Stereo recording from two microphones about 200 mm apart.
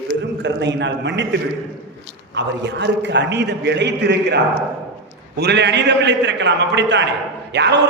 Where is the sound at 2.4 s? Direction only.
60° right (ahead or behind).